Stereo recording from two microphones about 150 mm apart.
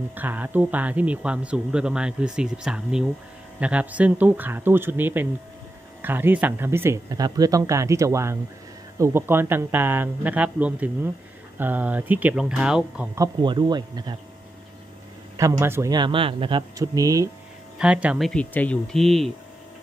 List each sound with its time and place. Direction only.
0.1 s speech: 10° right (ahead or behind)
13.1 s speech: 25° right (ahead or behind)
15.3 s speech: 20° right (ahead or behind)
15.9 s speech: 35° right (ahead or behind)
17.7 s speech: 10° right (ahead or behind)
18.3 s speech: 10° left (ahead or behind)